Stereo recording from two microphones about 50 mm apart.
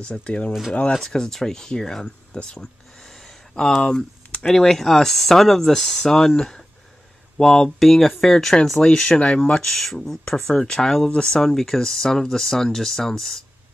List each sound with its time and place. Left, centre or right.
0.0 s speech: left
0.5 s speech: centre
0.9 s speech: centre
2.3 s a sound: centre
4.5 s speech: centre